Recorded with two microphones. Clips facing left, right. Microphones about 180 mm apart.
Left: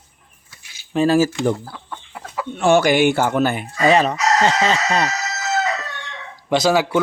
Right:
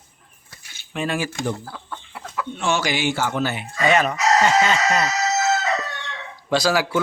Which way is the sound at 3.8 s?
30° left (ahead or behind).